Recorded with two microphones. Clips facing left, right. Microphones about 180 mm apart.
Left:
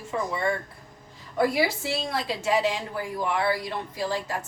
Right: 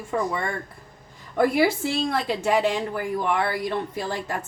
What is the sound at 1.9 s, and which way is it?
A woman's voice, 55° right (ahead or behind).